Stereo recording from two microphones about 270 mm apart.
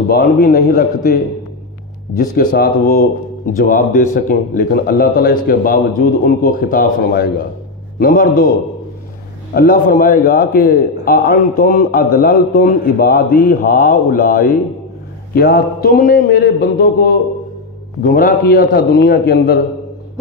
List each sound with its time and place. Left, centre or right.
0.1 s a man's voice: left
9.5 s a man's voice: left